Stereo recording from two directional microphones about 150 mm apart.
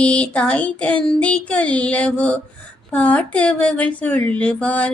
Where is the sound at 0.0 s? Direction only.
10° left (ahead or behind).